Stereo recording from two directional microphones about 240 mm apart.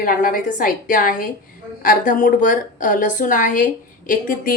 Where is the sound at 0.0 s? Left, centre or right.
Left.